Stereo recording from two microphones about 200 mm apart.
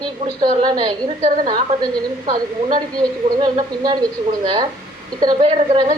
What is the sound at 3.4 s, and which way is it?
Speech, 20° right (ahead or behind).